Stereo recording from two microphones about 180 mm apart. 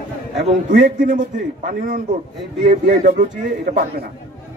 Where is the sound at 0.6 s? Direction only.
45° right (ahead or behind).